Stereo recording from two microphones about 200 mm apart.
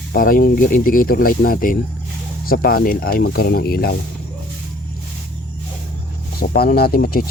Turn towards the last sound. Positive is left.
turn(degrees=50)  # may be behind; listen again after turning